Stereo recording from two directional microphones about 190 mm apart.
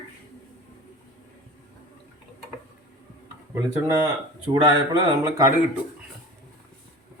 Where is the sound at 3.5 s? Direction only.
10° right (ahead or behind).